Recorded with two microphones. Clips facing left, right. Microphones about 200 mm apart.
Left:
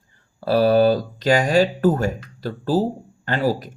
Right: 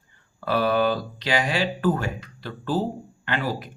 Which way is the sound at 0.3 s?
35° left (ahead or behind).